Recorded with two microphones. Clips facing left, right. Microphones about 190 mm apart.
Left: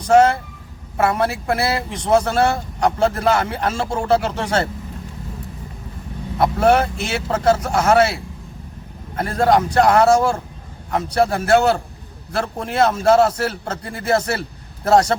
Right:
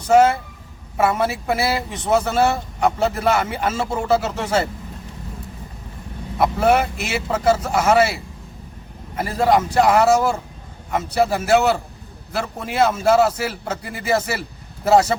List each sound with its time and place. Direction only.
0.1 s speech: 5° right (ahead or behind)
6.4 s speech: 5° right (ahead or behind)